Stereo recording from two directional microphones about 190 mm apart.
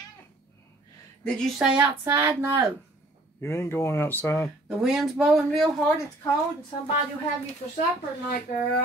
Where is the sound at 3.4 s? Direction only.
15° left (ahead or behind).